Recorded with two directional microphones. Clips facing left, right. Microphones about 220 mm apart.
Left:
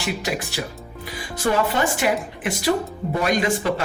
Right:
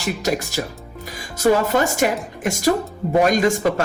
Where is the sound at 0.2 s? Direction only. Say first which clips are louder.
Right 4 dB; 40° right (ahead or behind).